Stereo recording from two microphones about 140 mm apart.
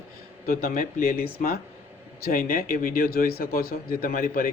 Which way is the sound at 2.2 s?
85° left.